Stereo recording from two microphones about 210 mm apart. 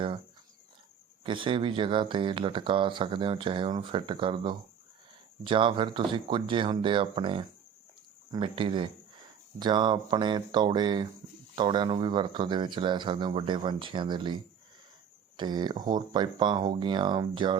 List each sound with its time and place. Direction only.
1.2 s speech: 25° right (ahead or behind)